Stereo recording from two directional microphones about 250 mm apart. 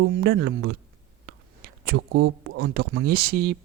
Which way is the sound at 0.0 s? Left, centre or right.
Right.